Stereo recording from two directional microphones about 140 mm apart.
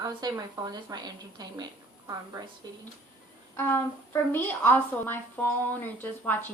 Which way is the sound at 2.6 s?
30° right (ahead or behind).